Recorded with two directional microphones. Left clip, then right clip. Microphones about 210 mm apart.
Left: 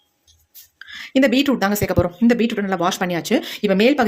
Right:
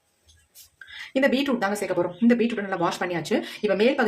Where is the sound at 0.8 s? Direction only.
40° left (ahead or behind).